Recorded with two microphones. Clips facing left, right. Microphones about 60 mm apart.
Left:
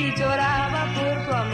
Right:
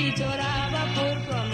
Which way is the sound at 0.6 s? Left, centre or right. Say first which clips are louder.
Left 3 dB; left.